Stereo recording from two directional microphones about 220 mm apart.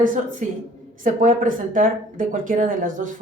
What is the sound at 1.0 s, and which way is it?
Speech, 35° right (ahead or behind).